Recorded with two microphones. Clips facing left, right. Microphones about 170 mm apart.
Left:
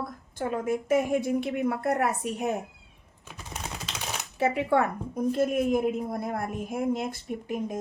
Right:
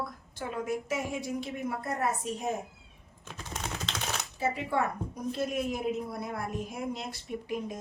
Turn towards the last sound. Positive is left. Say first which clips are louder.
# left 4 dB
turn(degrees=50)  # may be behind; listen again after turning